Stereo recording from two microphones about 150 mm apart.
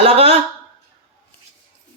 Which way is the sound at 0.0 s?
40° right (ahead or behind).